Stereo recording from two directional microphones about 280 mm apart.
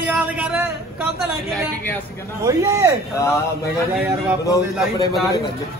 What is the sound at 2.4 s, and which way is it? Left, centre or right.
Speech, centre.